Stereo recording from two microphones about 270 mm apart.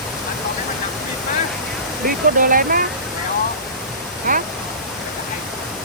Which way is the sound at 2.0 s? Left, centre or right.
Right.